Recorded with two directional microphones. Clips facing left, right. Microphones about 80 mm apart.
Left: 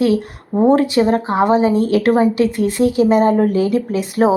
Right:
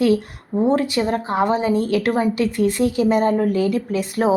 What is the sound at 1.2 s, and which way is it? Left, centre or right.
Speech, centre.